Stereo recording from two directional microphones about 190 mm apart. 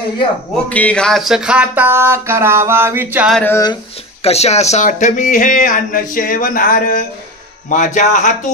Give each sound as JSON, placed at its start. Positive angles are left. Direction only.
{"t": 0.7, "sound": "a sound", "side_deg": 5}
{"t": 3.3, "sound": "speech", "side_deg": 15}
{"t": 4.2, "sound": "speech", "side_deg": 35}